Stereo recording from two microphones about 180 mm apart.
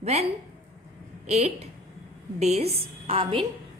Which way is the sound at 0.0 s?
35° right (ahead or behind).